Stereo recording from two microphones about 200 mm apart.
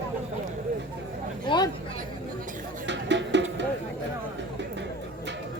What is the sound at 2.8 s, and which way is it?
Music, 60° right (ahead or behind).